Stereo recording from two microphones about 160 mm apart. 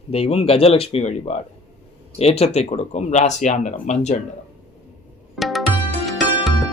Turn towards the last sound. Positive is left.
turn(degrees=0)  # may be behind; listen again after turning